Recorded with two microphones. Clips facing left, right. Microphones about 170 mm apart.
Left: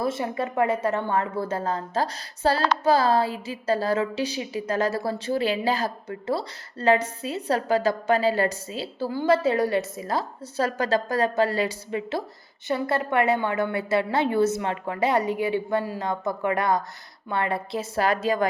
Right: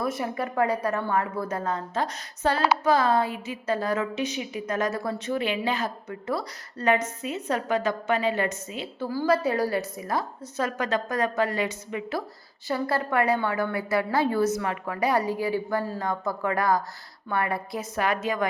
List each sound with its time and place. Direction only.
0.0 s a woman's voice: 25° left (ahead or behind)
12.6 s a woman's voice: 20° left (ahead or behind)